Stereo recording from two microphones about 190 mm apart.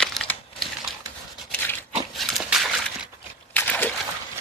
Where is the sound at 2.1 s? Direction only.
Centre (ahead or behind).